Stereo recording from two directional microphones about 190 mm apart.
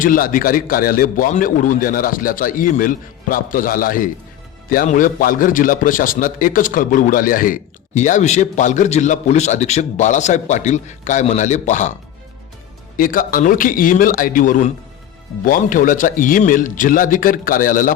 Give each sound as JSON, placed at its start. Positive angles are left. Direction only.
{"t": 0.0, "sound": "a man's voice", "side_deg": 45}
{"t": 13.0, "sound": "a man's voice", "side_deg": 45}